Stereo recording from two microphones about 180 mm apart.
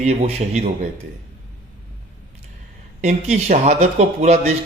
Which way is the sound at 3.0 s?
40° right (ahead or behind).